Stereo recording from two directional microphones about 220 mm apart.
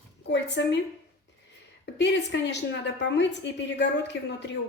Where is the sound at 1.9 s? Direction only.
50° left (ahead or behind).